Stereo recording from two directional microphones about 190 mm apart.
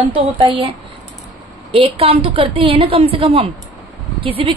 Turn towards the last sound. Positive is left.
turn(degrees=-30)  # may be behind; listen again after turning